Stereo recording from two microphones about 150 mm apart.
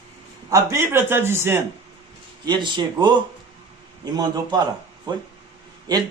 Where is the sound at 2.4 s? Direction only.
30° right (ahead or behind).